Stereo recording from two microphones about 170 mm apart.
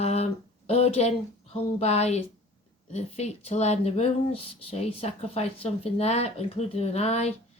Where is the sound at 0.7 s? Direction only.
35° left (ahead or behind).